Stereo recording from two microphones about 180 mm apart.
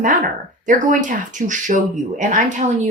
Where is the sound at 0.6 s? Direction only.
45° right (ahead or behind).